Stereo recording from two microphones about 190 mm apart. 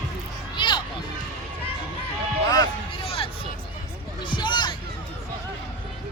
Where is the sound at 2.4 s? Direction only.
20° left (ahead or behind).